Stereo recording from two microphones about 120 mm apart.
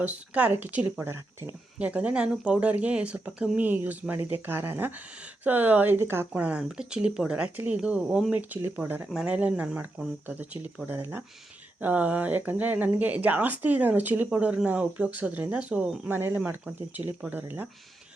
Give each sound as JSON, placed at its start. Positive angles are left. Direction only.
{"t": 0.0, "sound": "speech", "side_deg": -15}
{"t": 1.8, "sound": "speech", "side_deg": -10}
{"t": 9.0, "sound": "speech", "side_deg": -5}